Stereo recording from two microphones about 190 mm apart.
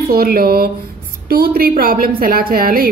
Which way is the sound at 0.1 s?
50° right (ahead or behind).